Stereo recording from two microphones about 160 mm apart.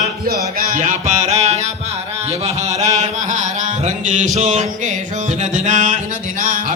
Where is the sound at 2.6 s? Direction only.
45° right (ahead or behind).